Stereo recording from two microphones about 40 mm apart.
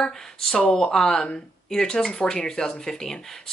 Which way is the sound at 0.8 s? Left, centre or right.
Centre.